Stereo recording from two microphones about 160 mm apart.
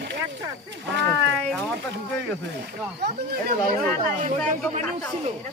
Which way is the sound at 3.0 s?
90° right.